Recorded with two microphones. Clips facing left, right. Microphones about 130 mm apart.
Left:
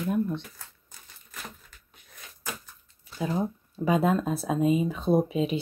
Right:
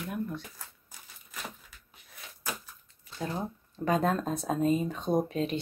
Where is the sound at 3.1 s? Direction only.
10° left (ahead or behind).